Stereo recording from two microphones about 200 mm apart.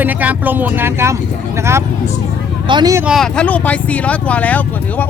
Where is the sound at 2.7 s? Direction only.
20° right (ahead or behind).